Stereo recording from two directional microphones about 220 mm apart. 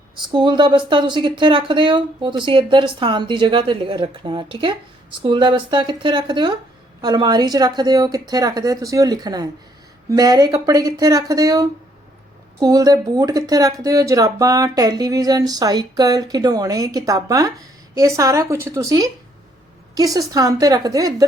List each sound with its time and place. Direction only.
0.2 s a woman's voice: 20° right (ahead or behind)